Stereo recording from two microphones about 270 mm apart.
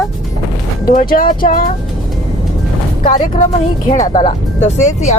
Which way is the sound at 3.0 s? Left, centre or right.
Left.